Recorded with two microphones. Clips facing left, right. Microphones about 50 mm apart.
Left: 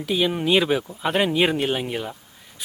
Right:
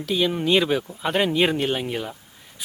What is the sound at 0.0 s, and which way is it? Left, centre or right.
Speech, centre.